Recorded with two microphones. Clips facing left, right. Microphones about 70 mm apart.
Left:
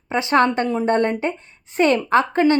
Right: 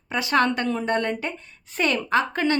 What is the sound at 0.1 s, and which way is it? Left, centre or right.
A woman's voice, left.